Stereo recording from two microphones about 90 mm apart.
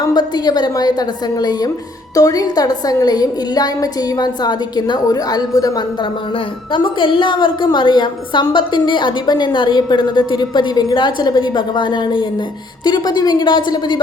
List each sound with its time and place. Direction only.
0.0 s a woman's voice: 50° left (ahead or behind)
6.7 s a woman's voice: 70° left (ahead or behind)